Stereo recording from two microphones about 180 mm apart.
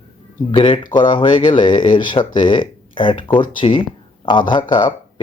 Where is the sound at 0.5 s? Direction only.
30° left (ahead or behind).